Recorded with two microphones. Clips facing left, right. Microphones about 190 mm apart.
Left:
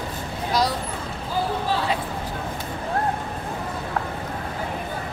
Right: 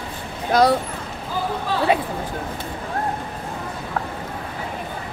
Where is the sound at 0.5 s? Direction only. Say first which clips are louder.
Right 7 dB; 55° right (ahead or behind).